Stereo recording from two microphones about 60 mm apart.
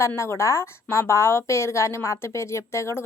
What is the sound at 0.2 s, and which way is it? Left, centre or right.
A woman's voice, left.